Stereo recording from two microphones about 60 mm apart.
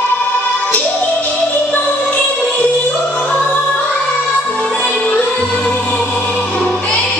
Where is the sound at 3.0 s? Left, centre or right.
Centre.